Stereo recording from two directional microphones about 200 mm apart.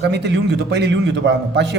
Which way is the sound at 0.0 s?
60° right (ahead or behind).